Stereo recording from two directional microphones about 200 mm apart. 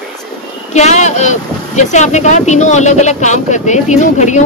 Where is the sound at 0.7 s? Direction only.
35° left (ahead or behind).